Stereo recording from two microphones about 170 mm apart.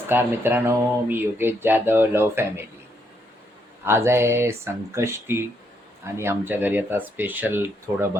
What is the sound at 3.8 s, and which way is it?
Speech, 15° right (ahead or behind).